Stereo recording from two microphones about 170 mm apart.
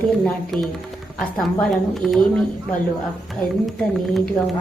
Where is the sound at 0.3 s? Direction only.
Centre (ahead or behind).